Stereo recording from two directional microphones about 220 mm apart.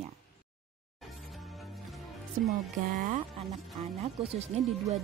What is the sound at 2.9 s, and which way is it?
Speech, 35° right (ahead or behind).